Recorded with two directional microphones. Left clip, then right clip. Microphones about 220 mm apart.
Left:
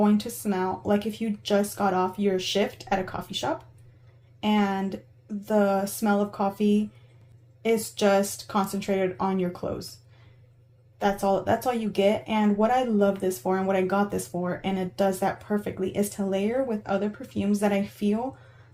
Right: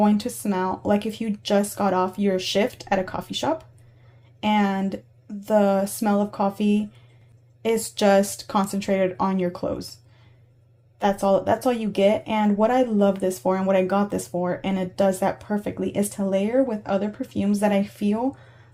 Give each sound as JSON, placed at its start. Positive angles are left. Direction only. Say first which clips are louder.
{"t": 0.0, "sound": "speech", "louder": "right 3 dB", "side_deg": -35}
{"t": 11.0, "sound": "speech", "louder": "right 4 dB", "side_deg": -35}